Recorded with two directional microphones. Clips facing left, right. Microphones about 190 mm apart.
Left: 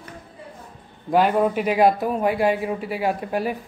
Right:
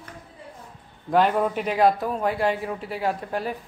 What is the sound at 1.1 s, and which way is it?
A man's voice, 5° left (ahead or behind).